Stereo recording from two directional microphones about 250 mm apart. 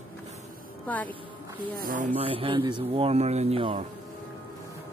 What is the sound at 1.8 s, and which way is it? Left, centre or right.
Speech, right.